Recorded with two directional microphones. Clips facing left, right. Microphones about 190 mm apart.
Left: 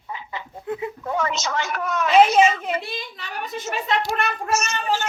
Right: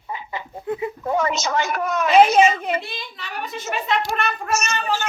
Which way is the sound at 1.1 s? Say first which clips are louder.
Right 3 dB; 10° right (ahead or behind).